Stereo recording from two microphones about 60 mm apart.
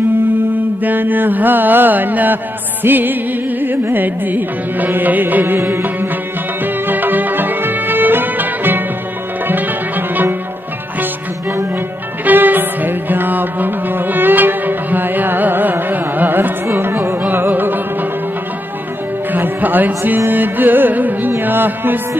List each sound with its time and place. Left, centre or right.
0.8 s music: right
12.3 s music: right
16.6 s carnatic music: right
17.3 s music: right
19.3 s music: right
20.2 s carnatic music: right
21.3 s music: right